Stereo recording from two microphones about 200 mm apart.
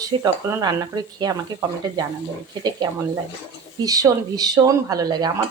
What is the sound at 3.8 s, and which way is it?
Speech, 15° right (ahead or behind).